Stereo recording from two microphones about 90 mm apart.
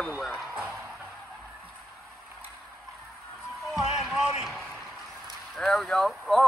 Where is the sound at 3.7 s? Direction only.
5° right (ahead or behind).